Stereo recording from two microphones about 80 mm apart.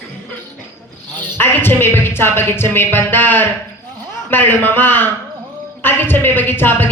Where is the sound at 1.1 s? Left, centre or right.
Left.